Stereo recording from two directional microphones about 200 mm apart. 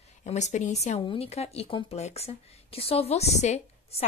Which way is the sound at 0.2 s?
35° left (ahead or behind).